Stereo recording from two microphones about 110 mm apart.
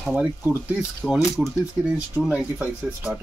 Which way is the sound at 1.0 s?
5° left (ahead or behind).